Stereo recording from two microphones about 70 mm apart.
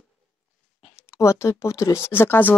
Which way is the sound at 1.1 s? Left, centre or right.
Left.